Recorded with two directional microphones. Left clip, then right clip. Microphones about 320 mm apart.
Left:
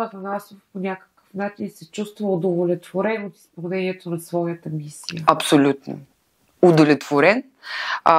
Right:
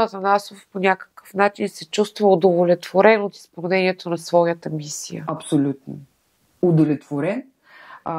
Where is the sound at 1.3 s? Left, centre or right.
Centre.